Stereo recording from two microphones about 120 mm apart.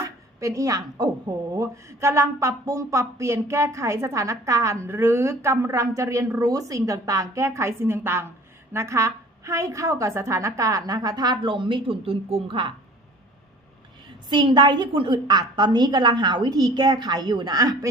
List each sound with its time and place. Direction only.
0.0 s speech: 25° right (ahead or behind); by 12.7 s 45° right (ahead or behind)
14.3 s a woman's voice: 40° right (ahead or behind)